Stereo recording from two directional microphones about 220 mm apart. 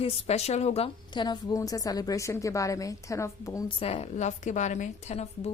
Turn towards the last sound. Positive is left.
turn(degrees=30)  # may be behind; listen again after turning